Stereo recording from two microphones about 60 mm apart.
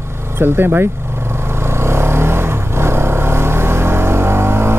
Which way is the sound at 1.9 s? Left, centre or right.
Right.